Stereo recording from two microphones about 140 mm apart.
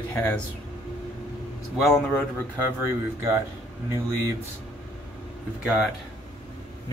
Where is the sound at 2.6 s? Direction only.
20° right (ahead or behind).